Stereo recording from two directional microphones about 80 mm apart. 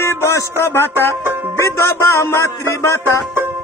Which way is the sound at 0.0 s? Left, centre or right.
Left.